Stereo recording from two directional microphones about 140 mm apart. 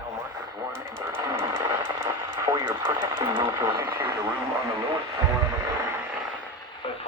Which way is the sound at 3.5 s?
20° right (ahead or behind).